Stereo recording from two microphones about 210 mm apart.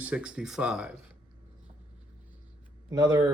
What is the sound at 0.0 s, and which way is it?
Speech, 5° right (ahead or behind).